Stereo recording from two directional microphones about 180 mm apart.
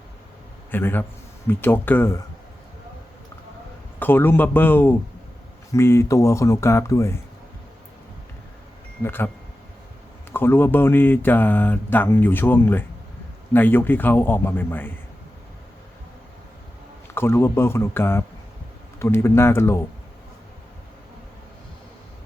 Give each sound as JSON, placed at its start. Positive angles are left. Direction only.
{"t": 0.7, "sound": "speech", "side_deg": 10}
{"t": 4.0, "sound": "speech", "side_deg": 10}
{"t": 9.0, "sound": "speech", "side_deg": 10}
{"t": 10.3, "sound": "speech", "side_deg": 10}
{"t": 17.2, "sound": "speech", "side_deg": 15}